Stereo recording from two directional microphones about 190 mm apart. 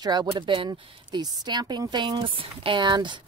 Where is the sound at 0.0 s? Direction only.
20° right (ahead or behind).